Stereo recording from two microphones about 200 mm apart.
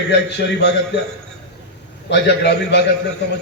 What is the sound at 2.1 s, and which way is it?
Speech, 55° left (ahead or behind).